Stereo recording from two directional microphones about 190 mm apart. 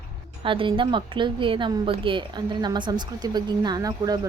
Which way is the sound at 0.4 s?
25° right (ahead or behind).